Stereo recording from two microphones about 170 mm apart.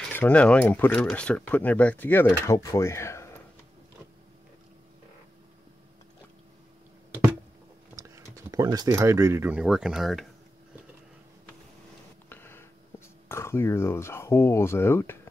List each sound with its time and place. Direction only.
0.1 s speech: 10° left (ahead or behind)
7.9 s speech: 20° right (ahead or behind); by 10.2 s centre (ahead or behind)
12.3 s a sound: 15° left (ahead or behind)
13.3 s speech: 15° left (ahead or behind)